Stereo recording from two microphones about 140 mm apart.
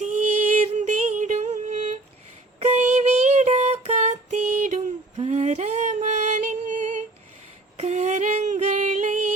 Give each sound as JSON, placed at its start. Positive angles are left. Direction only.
{"t": 0.0, "sound": "music", "side_deg": -60}
{"t": 2.6, "sound": "child singing", "side_deg": -55}
{"t": 7.8, "sound": "female singing", "side_deg": -50}